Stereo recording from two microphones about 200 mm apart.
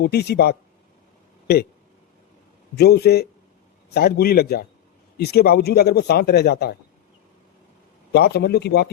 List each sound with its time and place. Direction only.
0.0 s speech: 55° left (ahead or behind)
2.7 s speech: 55° left (ahead or behind)
8.1 s speech: 55° left (ahead or behind)